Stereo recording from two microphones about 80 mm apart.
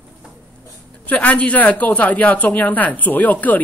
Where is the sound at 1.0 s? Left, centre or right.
Centre.